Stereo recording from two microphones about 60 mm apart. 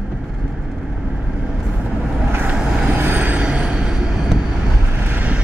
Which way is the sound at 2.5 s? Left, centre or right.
Centre.